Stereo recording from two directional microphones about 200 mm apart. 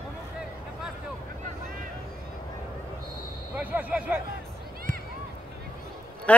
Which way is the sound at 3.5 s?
5° right (ahead or behind).